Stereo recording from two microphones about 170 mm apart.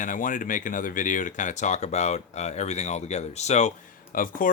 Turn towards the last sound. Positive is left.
turn(degrees=55)  # may be behind; listen again after turning